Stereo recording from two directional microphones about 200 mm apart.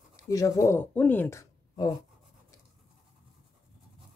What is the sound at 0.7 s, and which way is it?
Speech, 10° left (ahead or behind).